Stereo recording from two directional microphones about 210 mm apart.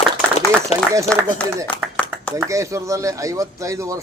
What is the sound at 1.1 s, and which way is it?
Speech, 5° left (ahead or behind).